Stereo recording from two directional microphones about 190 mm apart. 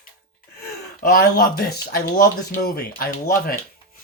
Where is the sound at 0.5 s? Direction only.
55° left (ahead or behind).